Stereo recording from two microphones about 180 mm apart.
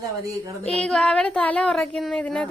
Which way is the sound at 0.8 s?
5° left (ahead or behind).